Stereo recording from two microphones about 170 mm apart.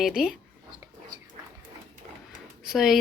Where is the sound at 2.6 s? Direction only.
Centre (ahead or behind).